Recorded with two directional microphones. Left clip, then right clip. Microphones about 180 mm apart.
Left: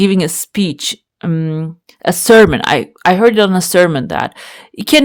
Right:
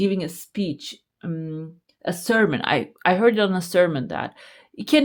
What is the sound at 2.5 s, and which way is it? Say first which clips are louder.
Speech: left 9 dB; 30° left (ahead or behind).